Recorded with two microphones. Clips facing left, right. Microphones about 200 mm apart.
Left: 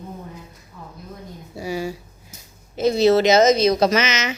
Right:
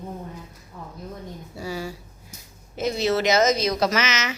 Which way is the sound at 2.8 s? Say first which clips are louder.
Left 7 dB; 30° left (ahead or behind).